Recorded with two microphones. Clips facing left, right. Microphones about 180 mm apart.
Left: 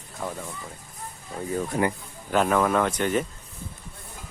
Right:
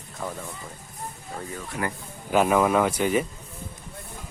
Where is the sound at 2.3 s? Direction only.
10° right (ahead or behind).